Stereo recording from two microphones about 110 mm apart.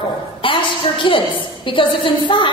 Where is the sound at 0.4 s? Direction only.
50° left (ahead or behind).